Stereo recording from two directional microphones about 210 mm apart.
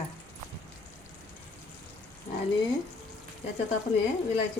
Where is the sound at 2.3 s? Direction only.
35° left (ahead or behind).